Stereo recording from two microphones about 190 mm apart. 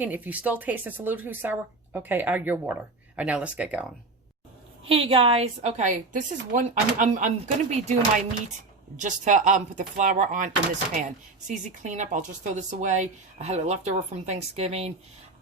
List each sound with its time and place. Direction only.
0.0 s speech: 10° right (ahead or behind)
4.9 s a woman's voice: 30° right (ahead or behind)